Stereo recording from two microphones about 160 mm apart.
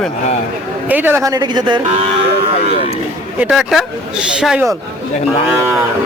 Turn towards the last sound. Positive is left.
turn(degrees=-5)  # may be behind; listen again after turning